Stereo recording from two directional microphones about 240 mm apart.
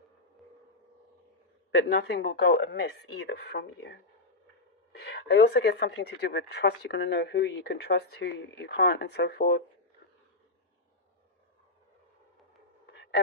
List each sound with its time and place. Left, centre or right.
1.7 s speech: left